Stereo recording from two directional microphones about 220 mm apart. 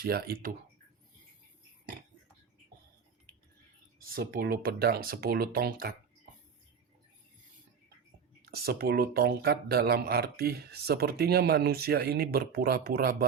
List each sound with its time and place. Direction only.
0.0 s speech: 45° right (ahead or behind)
4.0 s speech: 40° right (ahead or behind)
8.4 s speech: 45° right (ahead or behind)